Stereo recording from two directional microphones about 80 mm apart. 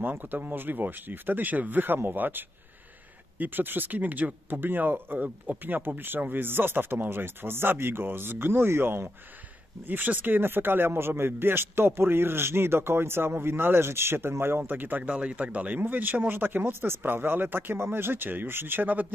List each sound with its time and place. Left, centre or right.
0.0 s speech: right